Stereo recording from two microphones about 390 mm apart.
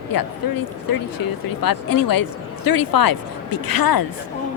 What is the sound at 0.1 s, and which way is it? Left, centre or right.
Speech, left.